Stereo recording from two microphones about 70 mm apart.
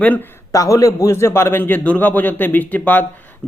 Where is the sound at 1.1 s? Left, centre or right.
Left.